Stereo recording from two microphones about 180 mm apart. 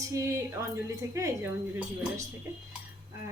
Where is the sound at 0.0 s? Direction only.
15° right (ahead or behind).